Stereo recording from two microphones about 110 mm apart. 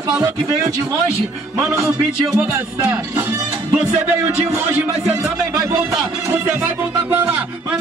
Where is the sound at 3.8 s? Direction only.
20° right (ahead or behind).